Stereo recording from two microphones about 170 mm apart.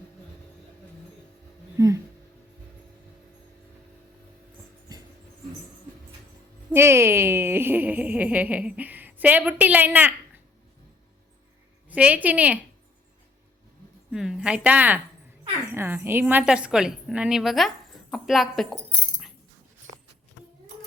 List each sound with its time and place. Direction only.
1.8 s speech: 20° right (ahead or behind)
6.7 s speech: 15° right (ahead or behind)
11.9 s speech: 10° right (ahead or behind)
14.1 s a woman's voice: 5° right (ahead or behind)